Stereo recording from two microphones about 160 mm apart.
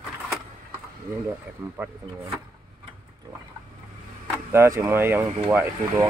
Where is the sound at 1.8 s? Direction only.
10° right (ahead or behind).